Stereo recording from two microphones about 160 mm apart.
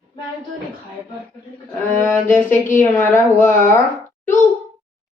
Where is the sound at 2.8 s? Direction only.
15° left (ahead or behind).